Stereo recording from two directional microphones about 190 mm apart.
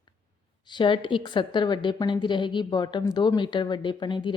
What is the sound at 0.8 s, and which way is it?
A woman's voice, 25° left (ahead or behind).